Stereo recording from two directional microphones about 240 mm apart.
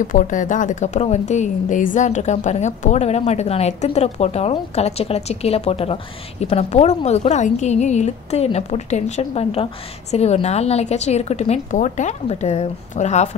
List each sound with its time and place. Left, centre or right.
0.0 s a woman's voice: left